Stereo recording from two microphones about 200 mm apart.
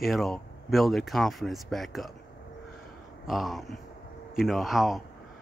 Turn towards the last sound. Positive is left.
turn(degrees=0)  # may be behind; listen again after turning